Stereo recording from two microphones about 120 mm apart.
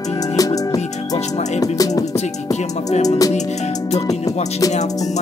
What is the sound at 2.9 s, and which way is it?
Music, 70° left (ahead or behind).